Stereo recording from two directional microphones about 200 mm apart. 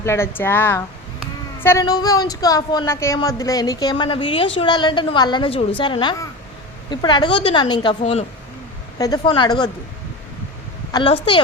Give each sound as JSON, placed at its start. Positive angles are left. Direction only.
{"t": 0.0, "sound": "a woman's voice", "side_deg": 15}
{"t": 8.0, "sound": "speech", "side_deg": 35}
{"t": 9.0, "sound": "a woman's voice", "side_deg": 20}
{"t": 10.9, "sound": "a woman's voice", "side_deg": 25}